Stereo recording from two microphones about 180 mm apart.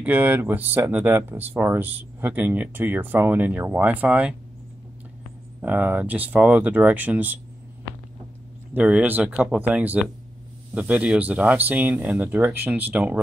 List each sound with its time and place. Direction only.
0.0 s speech: 10° right (ahead or behind)
5.6 s speech: 10° right (ahead or behind)
8.7 s speech: 10° right (ahead or behind)